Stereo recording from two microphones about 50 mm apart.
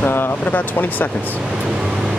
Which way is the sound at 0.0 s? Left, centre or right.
Left.